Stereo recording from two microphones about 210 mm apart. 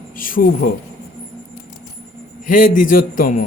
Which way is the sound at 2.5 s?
40° left (ahead or behind).